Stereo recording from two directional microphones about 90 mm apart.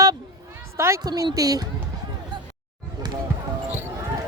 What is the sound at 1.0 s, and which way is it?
Speech, 45° right (ahead or behind).